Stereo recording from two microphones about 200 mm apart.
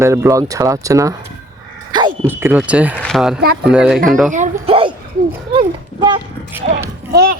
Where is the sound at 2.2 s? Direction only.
10° right (ahead or behind).